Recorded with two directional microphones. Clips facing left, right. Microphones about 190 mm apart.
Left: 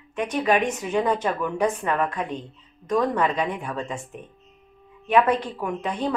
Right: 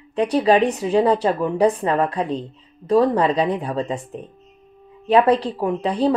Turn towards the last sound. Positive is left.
turn(degrees=-35)  # may be behind; listen again after turning